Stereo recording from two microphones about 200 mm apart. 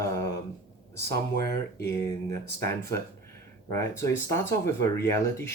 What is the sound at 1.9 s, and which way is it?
Speech, 15° left (ahead or behind).